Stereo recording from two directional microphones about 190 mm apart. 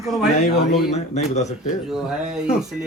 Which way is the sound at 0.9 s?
35° left (ahead or behind).